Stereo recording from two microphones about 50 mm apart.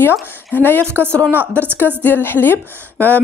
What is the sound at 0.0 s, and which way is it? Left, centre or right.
A woman's voice, left.